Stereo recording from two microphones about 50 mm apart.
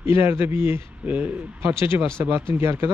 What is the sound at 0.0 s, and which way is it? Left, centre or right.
Speech, right.